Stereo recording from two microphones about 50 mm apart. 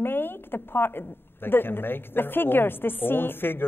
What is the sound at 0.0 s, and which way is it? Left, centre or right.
A woman's voice, left.